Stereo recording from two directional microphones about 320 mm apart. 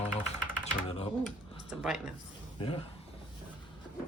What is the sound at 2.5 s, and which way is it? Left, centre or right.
Speech, centre.